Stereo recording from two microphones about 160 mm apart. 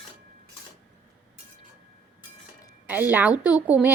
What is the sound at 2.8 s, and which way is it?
Speech, 10° right (ahead or behind).